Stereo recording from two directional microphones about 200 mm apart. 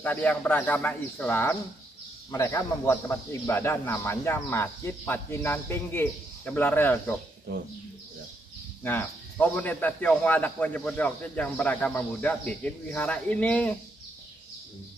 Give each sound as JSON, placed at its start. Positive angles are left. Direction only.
{"t": 0.0, "sound": "speech", "side_deg": 5}
{"t": 7.5, "sound": "speech", "side_deg": -50}
{"t": 8.8, "sound": "speech", "side_deg": 10}